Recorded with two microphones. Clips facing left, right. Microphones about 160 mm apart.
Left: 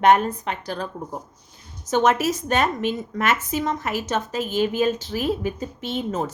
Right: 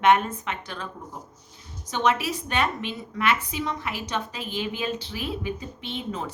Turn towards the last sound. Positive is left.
turn(degrees=45)  # may be behind; listen again after turning